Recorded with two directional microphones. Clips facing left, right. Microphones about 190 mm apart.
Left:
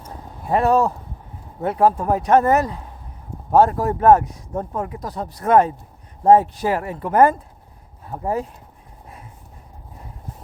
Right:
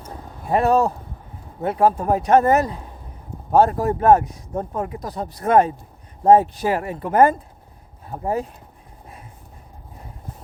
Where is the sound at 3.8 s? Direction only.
25° right (ahead or behind).